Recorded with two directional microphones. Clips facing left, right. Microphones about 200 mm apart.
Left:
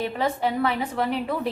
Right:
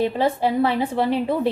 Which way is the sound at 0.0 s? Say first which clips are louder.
Right 5 dB; 30° right (ahead or behind).